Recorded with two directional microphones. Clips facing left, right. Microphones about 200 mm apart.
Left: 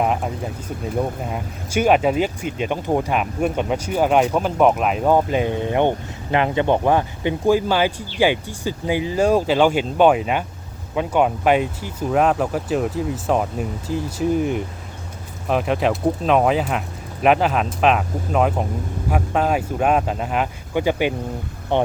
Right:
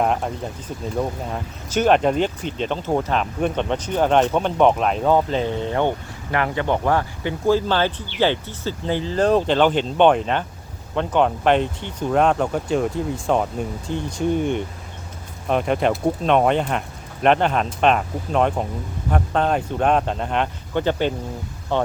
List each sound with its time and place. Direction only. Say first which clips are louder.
0.0 s speech: even; 5° left (ahead or behind)
1.3 s speech: left 1 dB; 10° left (ahead or behind)